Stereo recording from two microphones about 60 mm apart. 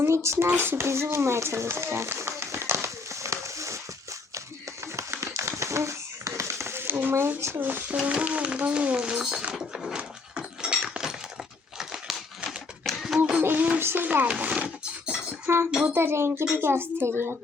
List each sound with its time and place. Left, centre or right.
0.0 s speech: right
4.4 s a sound: right
7.1 s speech: right
8.1 s speech: right
9.6 s a sound: centre
10.0 s dog: centre
10.8 s a sound: centre
12.5 s typewriter: centre
13.4 s music: right
13.8 s dishes: right; by 15.2 s centre
15.5 s a child's voice: right